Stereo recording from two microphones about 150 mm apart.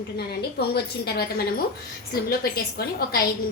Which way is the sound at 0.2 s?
90° left.